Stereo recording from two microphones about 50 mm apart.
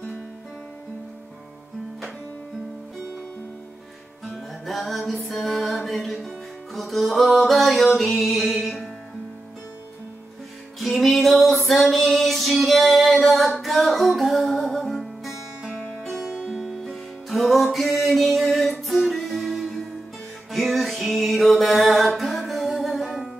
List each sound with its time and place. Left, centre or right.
4.6 s music: centre
10.8 s music: centre
16.3 s music: centre
16.5 s music: centre